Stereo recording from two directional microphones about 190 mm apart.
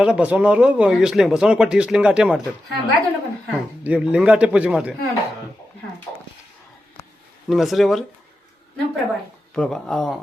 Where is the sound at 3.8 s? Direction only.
5° right (ahead or behind).